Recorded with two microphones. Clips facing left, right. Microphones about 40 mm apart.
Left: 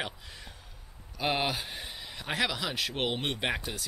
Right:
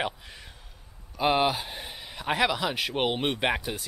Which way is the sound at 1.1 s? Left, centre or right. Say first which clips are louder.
Right 6 dB; centre.